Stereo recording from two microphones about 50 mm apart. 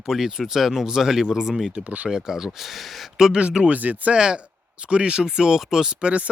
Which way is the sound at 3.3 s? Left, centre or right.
Centre.